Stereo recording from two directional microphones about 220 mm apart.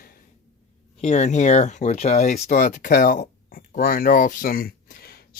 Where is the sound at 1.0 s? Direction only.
30° left (ahead or behind).